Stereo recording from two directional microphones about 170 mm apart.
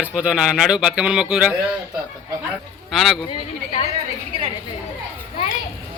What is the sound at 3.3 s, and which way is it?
Speech, 40° left (ahead or behind).